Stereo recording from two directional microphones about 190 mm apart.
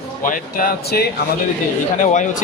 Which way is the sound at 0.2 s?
45° left (ahead or behind).